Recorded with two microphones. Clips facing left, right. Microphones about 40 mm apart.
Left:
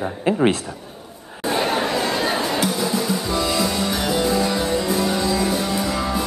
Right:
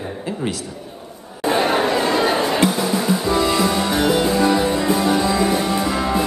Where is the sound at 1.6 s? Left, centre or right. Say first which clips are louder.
Right 3 dB; right.